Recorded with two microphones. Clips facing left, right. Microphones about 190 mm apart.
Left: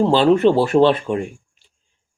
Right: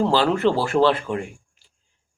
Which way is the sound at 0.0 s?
25° left (ahead or behind).